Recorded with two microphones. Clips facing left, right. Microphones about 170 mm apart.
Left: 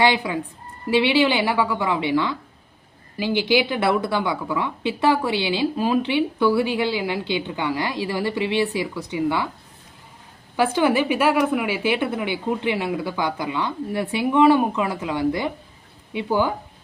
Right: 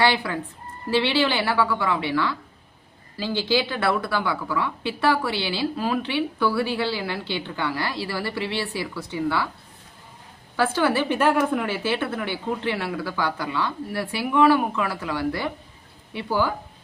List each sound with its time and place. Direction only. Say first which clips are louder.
0.0 s a woman's voice: left 2 dB; 15° left (ahead or behind)
10.6 s a woman's voice: left 3 dB; 15° left (ahead or behind)